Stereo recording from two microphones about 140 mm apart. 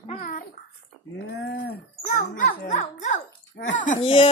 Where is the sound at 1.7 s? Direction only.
70° left (ahead or behind).